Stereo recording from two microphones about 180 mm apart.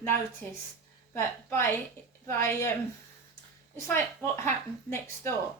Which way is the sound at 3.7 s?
15° left (ahead or behind).